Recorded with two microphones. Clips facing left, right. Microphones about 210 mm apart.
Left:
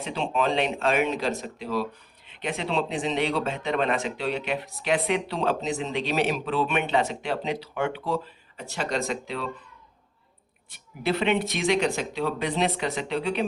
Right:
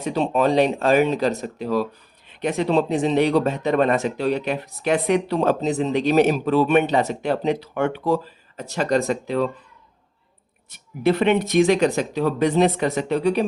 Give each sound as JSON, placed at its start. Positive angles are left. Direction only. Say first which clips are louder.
{"t": 0.0, "sound": "speech", "louder": "right 6 dB", "side_deg": -40}
{"t": 11.0, "sound": "speech", "louder": "right 6 dB", "side_deg": -50}